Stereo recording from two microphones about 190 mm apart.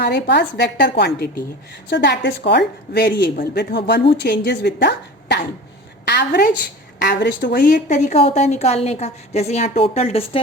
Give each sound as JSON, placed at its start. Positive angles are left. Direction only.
{"t": 0.0, "sound": "a woman's voice", "side_deg": 60}